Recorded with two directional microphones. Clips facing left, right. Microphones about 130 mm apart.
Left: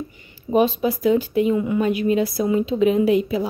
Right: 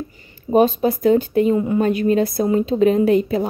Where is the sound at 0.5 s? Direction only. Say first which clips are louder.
Right 3 dB; 40° right (ahead or behind).